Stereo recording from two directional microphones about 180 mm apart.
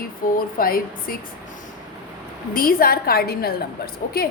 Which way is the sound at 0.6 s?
55° left (ahead or behind).